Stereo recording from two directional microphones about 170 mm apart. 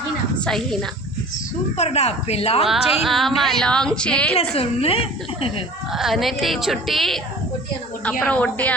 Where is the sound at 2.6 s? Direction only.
Centre (ahead or behind).